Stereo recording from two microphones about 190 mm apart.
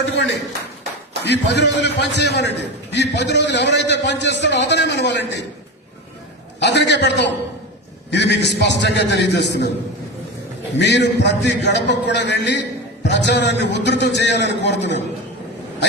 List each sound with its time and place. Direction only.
1.2 s a man's voice: 65° left (ahead or behind)
6.6 s a man's voice: 65° left (ahead or behind)
10.8 s a man's voice: 65° left (ahead or behind)